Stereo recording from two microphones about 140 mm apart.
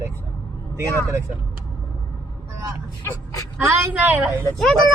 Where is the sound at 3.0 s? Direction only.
20° left (ahead or behind).